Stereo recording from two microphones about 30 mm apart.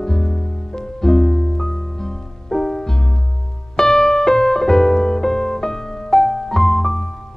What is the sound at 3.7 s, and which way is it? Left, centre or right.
Piano, centre.